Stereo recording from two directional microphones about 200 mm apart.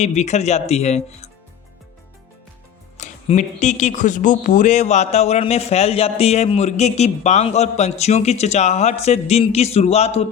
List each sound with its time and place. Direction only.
0.0 s speech: 35° left (ahead or behind)
3.0 s speech: 35° left (ahead or behind)